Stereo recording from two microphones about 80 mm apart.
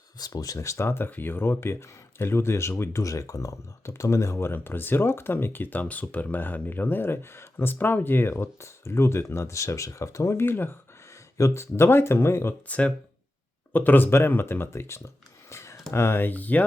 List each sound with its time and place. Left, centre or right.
0.2 s speech: left
12.6 s speech: centre